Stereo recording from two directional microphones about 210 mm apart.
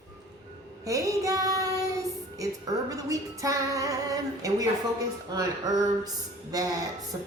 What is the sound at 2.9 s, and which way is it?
A woman's voice, 15° right (ahead or behind).